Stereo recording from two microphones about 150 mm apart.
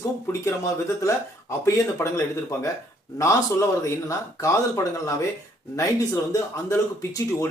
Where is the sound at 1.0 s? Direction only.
20° left (ahead or behind).